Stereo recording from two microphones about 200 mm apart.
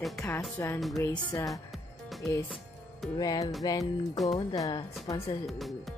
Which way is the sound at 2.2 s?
15° left (ahead or behind).